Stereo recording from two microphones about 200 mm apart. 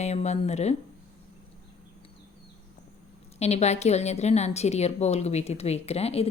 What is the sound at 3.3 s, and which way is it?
A woman's voice, 35° left (ahead or behind).